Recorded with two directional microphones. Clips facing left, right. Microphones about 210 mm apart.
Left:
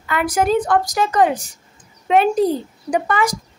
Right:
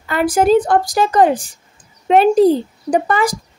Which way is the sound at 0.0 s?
30° right (ahead or behind).